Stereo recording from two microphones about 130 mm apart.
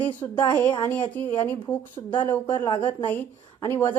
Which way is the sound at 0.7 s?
35° left (ahead or behind).